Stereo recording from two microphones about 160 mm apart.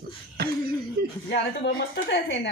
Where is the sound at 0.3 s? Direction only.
70° right (ahead or behind).